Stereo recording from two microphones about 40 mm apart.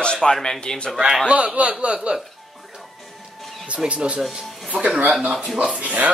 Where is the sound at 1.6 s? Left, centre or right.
Right.